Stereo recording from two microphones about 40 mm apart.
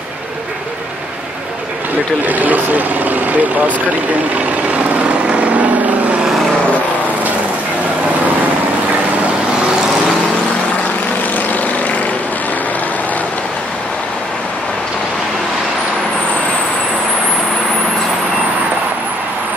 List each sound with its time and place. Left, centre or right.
2.2 s speech: right
5.3 s vehicle: right